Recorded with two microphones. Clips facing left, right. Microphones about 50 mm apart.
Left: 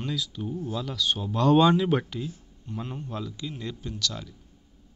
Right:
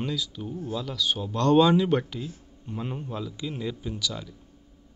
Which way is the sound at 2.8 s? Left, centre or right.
Centre.